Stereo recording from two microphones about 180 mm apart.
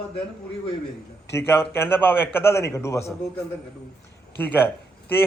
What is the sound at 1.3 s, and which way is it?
Speech, 15° left (ahead or behind).